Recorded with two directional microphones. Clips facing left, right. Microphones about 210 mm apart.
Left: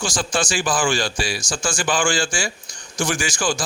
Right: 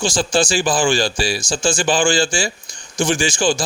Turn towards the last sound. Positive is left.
turn(degrees=-25)  # may be behind; listen again after turning